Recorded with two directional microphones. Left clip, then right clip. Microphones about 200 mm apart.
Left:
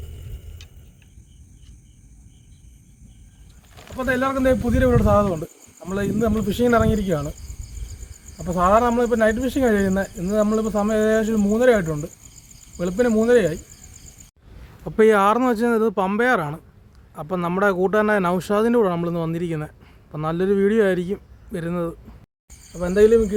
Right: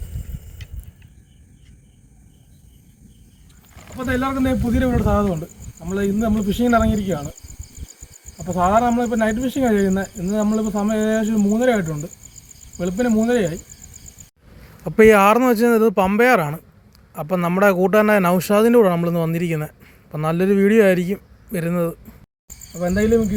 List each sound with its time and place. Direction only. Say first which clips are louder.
3.9 s speech: left 1 dB; 20° left (ahead or behind)
8.4 s speech: even; 15° left (ahead or behind)
14.8 s speech: right 4 dB; 10° right (ahead or behind)
22.8 s speech: left 3 dB; 10° left (ahead or behind)